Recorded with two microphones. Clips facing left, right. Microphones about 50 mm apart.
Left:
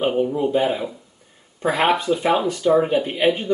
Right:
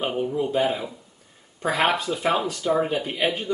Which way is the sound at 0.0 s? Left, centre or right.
Centre.